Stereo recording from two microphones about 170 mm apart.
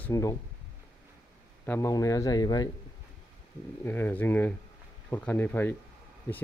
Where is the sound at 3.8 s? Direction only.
10° left (ahead or behind).